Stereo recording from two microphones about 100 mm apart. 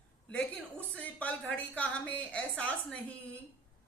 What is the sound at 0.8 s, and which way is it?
A woman's voice, 15° left (ahead or behind).